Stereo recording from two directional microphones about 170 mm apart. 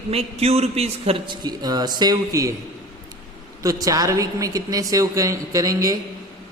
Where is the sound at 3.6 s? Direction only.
20° right (ahead or behind).